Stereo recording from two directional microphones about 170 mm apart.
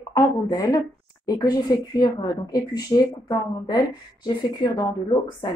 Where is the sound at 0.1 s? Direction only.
20° left (ahead or behind).